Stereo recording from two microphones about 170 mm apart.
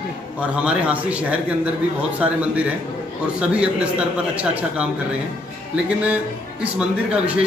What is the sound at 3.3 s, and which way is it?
A man's voice, 5° right (ahead or behind).